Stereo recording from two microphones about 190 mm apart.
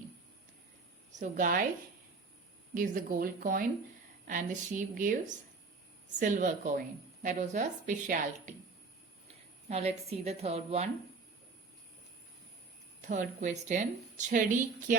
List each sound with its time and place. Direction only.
1.2 s a woman's voice: 45° right (ahead or behind)
2.7 s a woman's voice: 45° right (ahead or behind)
6.1 s a woman's voice: 40° right (ahead or behind)
13.1 s a woman's voice: 40° right (ahead or behind)